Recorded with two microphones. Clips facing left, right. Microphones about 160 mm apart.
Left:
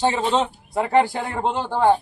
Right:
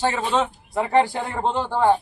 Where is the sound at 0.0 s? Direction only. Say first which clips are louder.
Left 2 dB; 20° left (ahead or behind).